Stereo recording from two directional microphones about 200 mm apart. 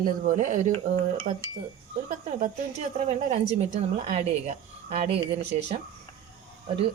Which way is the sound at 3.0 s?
35° right (ahead or behind).